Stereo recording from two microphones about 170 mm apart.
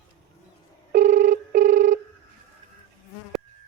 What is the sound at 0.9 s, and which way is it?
Telephone, 45° right (ahead or behind).